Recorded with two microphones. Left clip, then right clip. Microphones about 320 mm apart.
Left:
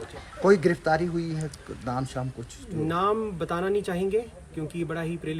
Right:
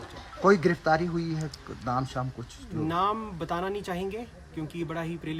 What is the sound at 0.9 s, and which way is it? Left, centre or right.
Speech, right.